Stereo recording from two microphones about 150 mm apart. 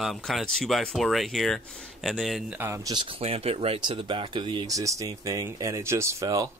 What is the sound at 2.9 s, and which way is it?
Speech, 35° right (ahead or behind).